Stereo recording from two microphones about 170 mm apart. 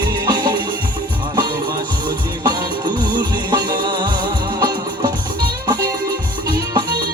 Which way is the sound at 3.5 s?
25° right (ahead or behind).